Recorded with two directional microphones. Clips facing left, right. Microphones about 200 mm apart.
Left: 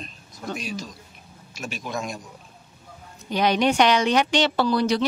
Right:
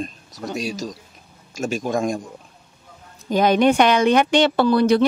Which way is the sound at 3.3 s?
50° right (ahead or behind).